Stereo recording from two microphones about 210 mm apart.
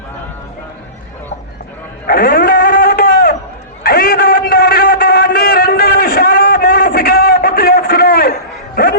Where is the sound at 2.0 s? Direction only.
45° left (ahead or behind).